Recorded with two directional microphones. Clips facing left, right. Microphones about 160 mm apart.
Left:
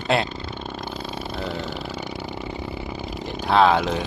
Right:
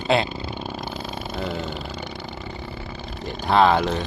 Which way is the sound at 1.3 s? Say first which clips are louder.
Right 2 dB; centre (ahead or behind).